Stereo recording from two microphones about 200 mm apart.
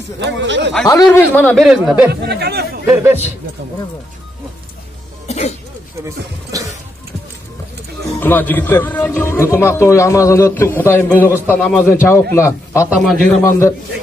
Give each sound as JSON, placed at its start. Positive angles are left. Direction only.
{"t": 0.2, "sound": "speech", "side_deg": -60}
{"t": 1.0, "sound": "a man's voice", "side_deg": 10}
{"t": 2.2, "sound": "speech", "side_deg": -55}
{"t": 2.9, "sound": "a man's voice", "side_deg": -15}
{"t": 5.3, "sound": "throat clearing", "side_deg": 35}
{"t": 6.5, "sound": "a man's voice", "side_deg": -15}
{"t": 8.2, "sound": "a man's voice", "side_deg": 10}
{"t": 12.9, "sound": "a man's voice", "side_deg": 0}